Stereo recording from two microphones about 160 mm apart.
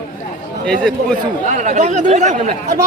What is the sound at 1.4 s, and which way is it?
Speech, 50° right (ahead or behind).